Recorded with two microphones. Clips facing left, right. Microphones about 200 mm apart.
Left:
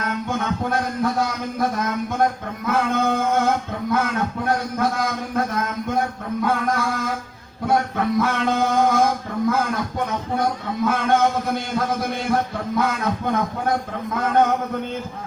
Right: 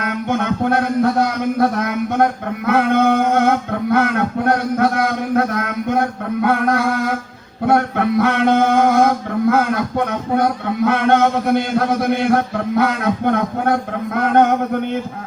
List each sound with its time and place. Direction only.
0.0 s speech: 65° right (ahead or behind)
2.6 s male singing: 65° right (ahead or behind)
7.7 s a sound: 65° right (ahead or behind)
10.8 s male singing: 65° right (ahead or behind)